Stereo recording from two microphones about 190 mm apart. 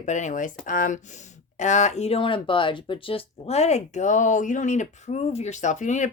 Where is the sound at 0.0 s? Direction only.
40° left (ahead or behind).